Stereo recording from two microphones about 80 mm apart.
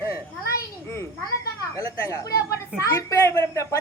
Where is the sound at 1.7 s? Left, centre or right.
Left.